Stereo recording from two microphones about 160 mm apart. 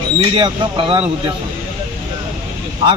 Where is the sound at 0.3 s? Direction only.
30° right (ahead or behind).